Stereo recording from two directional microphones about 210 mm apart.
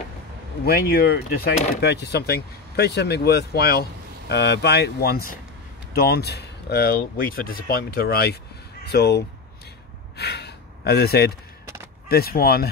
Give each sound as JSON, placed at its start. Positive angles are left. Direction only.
{"t": 0.7, "sound": "speech", "side_deg": 45}